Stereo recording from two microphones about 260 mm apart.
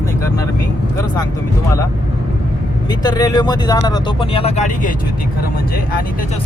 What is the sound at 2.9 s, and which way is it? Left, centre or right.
Speech, centre.